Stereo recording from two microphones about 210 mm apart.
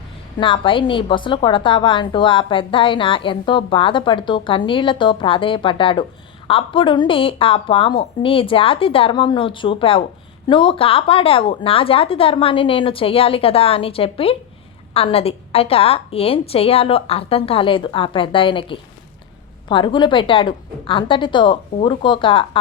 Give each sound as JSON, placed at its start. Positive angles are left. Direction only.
{"t": 0.3, "sound": "a woman's voice", "side_deg": 25}